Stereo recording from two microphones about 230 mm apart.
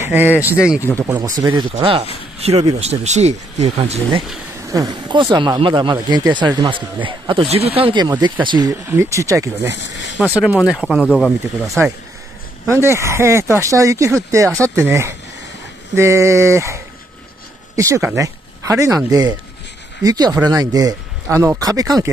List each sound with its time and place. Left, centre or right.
0.1 s speech: centre
9.8 s speech: left
10.4 s speech: centre
12.6 s speech: centre